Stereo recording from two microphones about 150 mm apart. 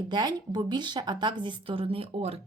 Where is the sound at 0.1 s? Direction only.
25° right (ahead or behind).